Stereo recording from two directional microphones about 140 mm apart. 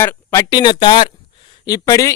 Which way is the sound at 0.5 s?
30° left (ahead or behind).